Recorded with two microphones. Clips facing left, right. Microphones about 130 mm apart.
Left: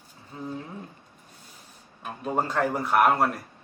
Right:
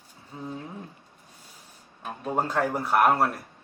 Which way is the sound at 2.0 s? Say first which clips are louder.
Even; centre (ahead or behind).